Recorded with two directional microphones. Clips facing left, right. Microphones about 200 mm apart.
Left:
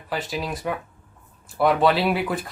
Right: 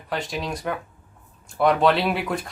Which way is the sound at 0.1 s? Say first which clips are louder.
Even; 5° left (ahead or behind).